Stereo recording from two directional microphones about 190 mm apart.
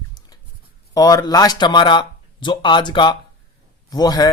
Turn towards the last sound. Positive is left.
turn(degrees=20)  # may be behind; listen again after turning